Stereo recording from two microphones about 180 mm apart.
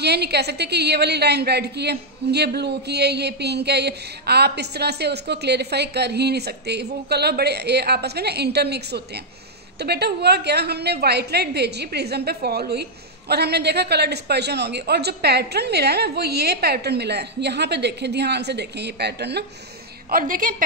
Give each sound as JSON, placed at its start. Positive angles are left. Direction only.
{"t": 0.0, "sound": "a woman's voice", "side_deg": -65}
{"t": 20.1, "sound": "a woman's voice", "side_deg": -50}